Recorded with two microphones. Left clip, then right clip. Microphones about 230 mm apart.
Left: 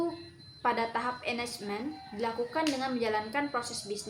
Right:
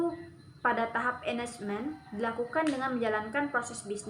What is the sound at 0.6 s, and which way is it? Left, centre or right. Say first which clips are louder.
A woman's voice: right 1 dB; centre.